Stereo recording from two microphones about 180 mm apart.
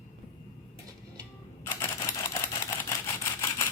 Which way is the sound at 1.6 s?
15° left (ahead or behind).